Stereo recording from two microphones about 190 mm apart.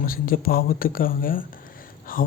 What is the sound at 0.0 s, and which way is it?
Speech, 50° left (ahead or behind).